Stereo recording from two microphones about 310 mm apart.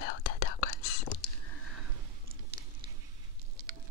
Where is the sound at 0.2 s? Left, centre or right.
Left.